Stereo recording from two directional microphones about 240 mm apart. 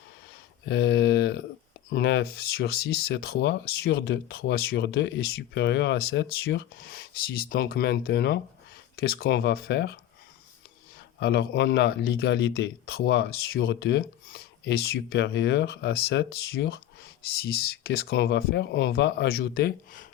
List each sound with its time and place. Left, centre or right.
0.6 s speech: left
11.2 s speech: left